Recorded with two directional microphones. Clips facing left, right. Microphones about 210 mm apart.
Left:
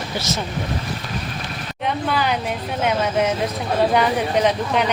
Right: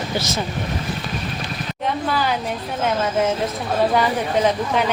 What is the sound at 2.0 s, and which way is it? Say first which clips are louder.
A woman's voice: left 1 dB; centre (ahead or behind).